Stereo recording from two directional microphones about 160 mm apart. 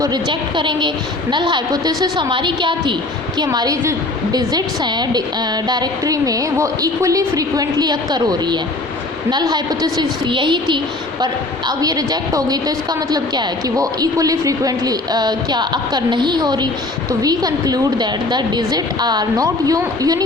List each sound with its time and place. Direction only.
0.0 s a woman's voice: 25° right (ahead or behind)
11.8 s a woman's voice: 25° right (ahead or behind)